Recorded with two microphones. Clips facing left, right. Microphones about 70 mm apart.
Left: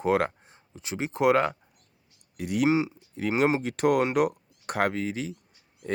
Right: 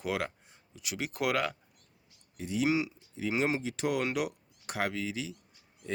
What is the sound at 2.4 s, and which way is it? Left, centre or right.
Speech, left.